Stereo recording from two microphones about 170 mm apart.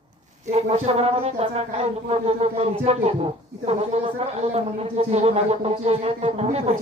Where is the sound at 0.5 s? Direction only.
40° right (ahead or behind).